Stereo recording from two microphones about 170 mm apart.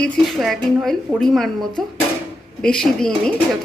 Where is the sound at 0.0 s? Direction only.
Centre (ahead or behind).